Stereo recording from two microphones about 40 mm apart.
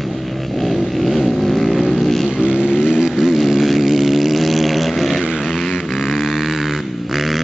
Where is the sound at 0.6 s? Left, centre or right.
Centre.